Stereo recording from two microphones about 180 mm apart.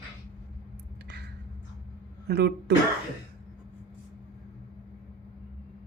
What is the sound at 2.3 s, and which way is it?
Speech, 65° right (ahead or behind).